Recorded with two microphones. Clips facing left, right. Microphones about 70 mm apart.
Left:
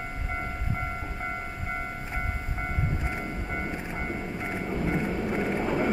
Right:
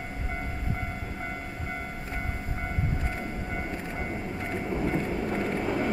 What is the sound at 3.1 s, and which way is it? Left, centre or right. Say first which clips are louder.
Train: left 1 dB; centre.